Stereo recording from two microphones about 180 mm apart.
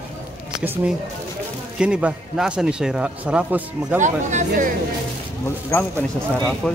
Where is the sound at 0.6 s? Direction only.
10° right (ahead or behind).